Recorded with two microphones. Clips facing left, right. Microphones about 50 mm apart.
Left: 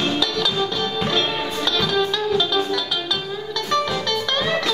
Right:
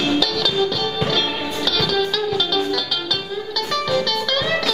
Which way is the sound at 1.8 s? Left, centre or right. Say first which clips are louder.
Even; centre.